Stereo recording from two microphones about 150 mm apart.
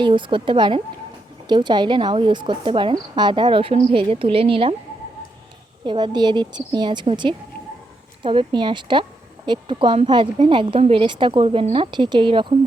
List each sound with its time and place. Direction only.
0.0 s speech: 35° right (ahead or behind)
5.8 s speech: 30° right (ahead or behind)